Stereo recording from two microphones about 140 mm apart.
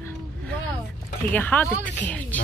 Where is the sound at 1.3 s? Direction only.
10° left (ahead or behind).